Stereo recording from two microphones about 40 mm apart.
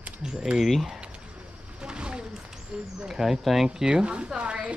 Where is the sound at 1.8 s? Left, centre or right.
Right.